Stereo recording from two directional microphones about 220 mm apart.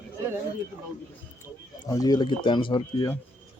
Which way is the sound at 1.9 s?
15° left (ahead or behind).